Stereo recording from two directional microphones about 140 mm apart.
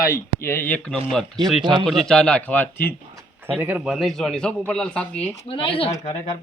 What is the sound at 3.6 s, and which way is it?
Speech, 10° right (ahead or behind).